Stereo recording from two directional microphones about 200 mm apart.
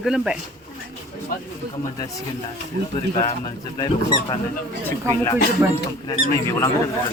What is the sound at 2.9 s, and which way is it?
Speech, 30° left (ahead or behind).